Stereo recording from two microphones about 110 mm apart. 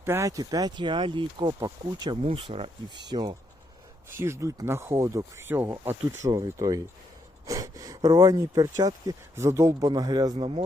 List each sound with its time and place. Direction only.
0.0 s speech: 25° right (ahead or behind); by 2.1 s 40° right (ahead or behind)
2.2 s speech: 60° right (ahead or behind)
2.9 s speech: 40° right (ahead or behind)
4.2 s speech: 25° right (ahead or behind)
9.9 s speech: 40° right (ahead or behind)
10.3 s speech: 60° right (ahead or behind)